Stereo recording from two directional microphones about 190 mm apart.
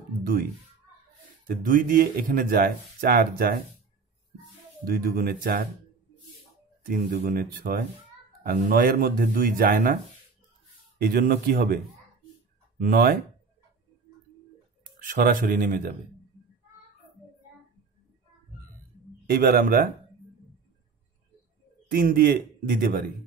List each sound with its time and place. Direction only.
1.6 s speech: 45° right (ahead or behind)
4.8 s speech: 50° right (ahead or behind)
6.9 s speech: 50° right (ahead or behind)
11.0 s speech: 50° right (ahead or behind)
15.0 s speech: 50° right (ahead or behind)
19.3 s speech: 50° right (ahead or behind)
21.9 s speech: 50° right (ahead or behind)